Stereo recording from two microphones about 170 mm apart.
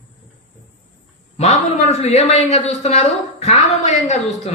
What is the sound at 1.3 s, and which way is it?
A man's voice, 40° left (ahead or behind).